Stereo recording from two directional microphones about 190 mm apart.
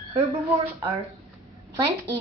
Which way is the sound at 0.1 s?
25° right (ahead or behind).